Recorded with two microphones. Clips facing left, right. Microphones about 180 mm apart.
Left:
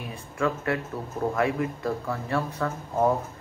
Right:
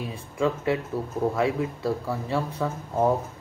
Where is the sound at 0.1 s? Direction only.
15° right (ahead or behind).